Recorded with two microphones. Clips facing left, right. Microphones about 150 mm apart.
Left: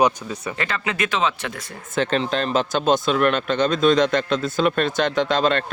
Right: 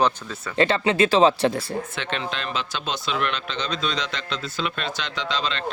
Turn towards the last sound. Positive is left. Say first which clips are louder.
# left 9 dB
turn(degrees=50)  # may be behind; listen again after turning